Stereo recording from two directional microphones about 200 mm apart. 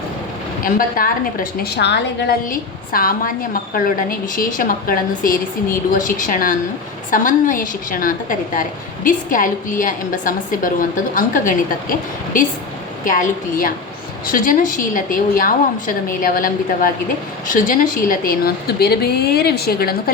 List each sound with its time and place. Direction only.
0.6 s a woman's voice: 45° left (ahead or behind)